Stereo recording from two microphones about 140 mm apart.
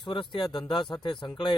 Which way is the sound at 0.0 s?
35° left (ahead or behind).